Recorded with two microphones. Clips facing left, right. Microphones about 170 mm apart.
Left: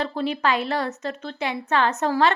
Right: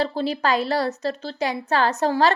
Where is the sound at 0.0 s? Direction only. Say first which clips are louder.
Right 1 dB; 35° right (ahead or behind).